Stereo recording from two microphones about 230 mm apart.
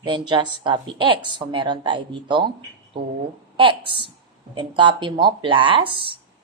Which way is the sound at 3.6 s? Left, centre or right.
Right.